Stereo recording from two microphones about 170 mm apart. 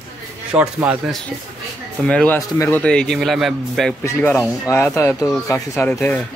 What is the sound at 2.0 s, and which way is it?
A man's voice, 10° left (ahead or behind).